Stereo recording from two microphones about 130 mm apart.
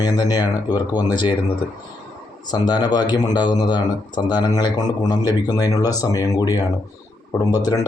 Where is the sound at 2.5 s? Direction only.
30° left (ahead or behind).